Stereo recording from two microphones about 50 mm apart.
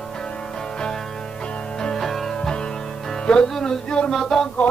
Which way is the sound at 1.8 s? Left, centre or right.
Centre.